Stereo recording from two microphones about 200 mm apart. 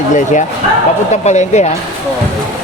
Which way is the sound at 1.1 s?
35° left (ahead or behind).